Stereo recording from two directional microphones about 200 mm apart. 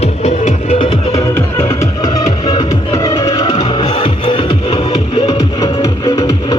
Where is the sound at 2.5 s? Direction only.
20° left (ahead or behind).